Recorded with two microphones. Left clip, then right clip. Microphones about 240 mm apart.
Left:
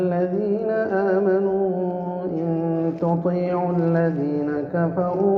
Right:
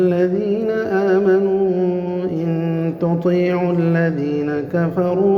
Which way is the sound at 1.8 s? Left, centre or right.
Right.